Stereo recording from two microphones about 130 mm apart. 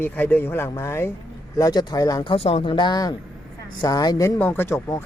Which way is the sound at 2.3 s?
50° left (ahead or behind).